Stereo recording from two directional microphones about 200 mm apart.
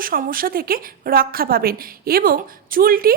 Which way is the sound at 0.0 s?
45° right (ahead or behind).